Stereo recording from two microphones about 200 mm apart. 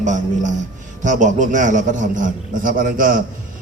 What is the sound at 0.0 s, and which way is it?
A man's voice, 35° right (ahead or behind).